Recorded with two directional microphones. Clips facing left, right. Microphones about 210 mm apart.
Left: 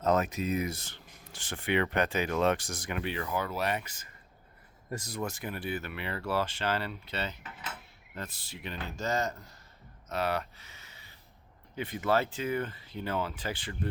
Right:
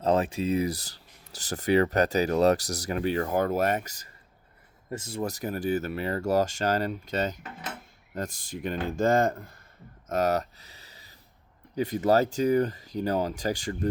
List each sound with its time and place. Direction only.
0.0 s speech: 30° right (ahead or behind)
4.9 s speech: 25° right (ahead or behind); by 9.5 s 55° right (ahead or behind)
10.1 s a sound: 45° right (ahead or behind)
11.7 s speech: 40° right (ahead or behind)